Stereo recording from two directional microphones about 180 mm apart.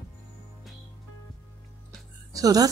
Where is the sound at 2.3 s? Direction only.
20° right (ahead or behind).